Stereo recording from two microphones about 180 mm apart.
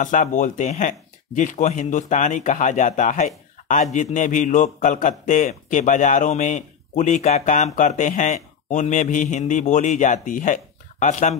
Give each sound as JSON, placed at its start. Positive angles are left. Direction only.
{"t": 0.0, "sound": "speech", "side_deg": 45}